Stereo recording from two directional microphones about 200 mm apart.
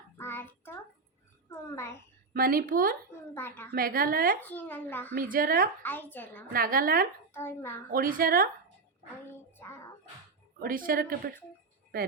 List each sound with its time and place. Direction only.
0.2 s child singing: 10° left (ahead or behind)
1.5 s a sound: 15° left (ahead or behind)
2.3 s a woman's voice: 45° right (ahead or behind)
3.3 s a woman's voice: 10° left (ahead or behind)
3.7 s a woman's voice: 45° right (ahead or behind)
4.4 s a child's voice: 10° left (ahead or behind)
5.1 s a woman's voice: 45° right (ahead or behind)
5.8 s a child's voice: 10° left (ahead or behind)
6.5 s a woman's voice: 45° right (ahead or behind)
7.3 s a child's voice: 10° left (ahead or behind)
7.9 s a woman's voice: 45° right (ahead or behind)
9.3 s a sound: 10° left (ahead or behind)
10.6 s a woman's voice: 45° right (ahead or behind)